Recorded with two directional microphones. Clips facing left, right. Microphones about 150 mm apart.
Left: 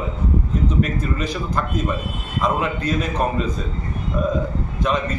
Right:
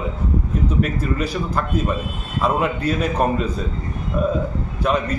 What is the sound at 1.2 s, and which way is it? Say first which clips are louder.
A man's voice: right 1 dB; 10° right (ahead or behind).